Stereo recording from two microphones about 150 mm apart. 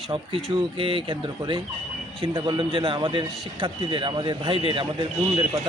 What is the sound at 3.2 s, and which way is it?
Speech, centre (ahead or behind).